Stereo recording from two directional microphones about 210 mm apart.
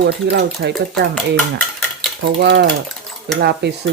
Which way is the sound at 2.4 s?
55° right (ahead or behind).